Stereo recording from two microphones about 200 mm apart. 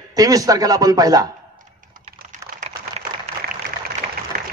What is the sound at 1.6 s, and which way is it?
Typing, 40° right (ahead or behind).